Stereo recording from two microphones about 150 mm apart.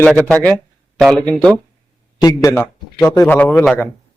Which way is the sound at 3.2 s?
10° left (ahead or behind).